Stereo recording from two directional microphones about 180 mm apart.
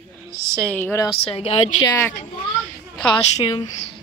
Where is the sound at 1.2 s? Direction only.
35° left (ahead or behind).